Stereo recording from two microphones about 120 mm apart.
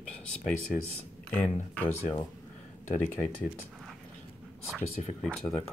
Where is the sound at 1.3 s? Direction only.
15° left (ahead or behind).